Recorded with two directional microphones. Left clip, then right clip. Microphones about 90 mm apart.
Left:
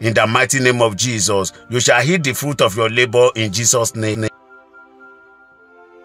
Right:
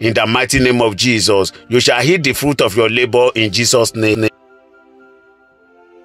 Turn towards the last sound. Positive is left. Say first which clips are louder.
# right 6 dB
turn(degrees=-45)  # may be behind; listen again after turning